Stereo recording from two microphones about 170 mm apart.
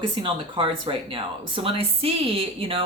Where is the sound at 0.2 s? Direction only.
30° right (ahead or behind).